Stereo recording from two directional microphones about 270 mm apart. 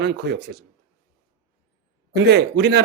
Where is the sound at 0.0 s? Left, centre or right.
Right.